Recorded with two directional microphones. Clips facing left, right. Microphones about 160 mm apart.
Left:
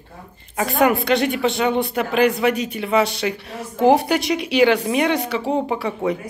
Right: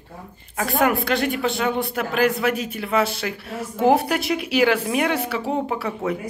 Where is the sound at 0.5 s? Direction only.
Centre (ahead or behind).